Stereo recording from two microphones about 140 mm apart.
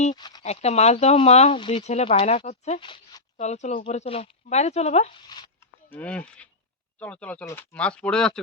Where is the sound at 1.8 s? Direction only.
50° left (ahead or behind).